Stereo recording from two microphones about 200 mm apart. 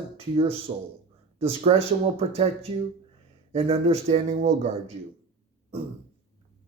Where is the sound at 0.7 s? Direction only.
40° right (ahead or behind).